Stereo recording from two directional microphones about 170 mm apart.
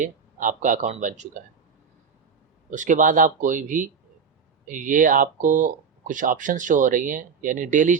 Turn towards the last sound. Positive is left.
turn(degrees=-50)  # may be behind; listen again after turning